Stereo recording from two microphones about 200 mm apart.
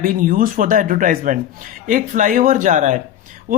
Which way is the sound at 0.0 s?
45° right (ahead or behind).